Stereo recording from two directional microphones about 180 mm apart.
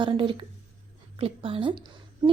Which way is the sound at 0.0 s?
30° right (ahead or behind).